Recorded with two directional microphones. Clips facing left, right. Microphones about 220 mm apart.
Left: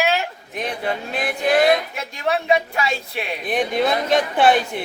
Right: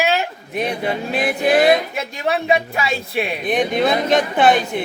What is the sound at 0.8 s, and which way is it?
Speech, 10° right (ahead or behind).